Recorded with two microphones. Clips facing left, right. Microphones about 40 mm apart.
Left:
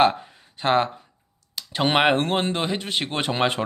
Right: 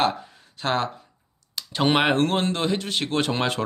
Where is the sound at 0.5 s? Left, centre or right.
Left.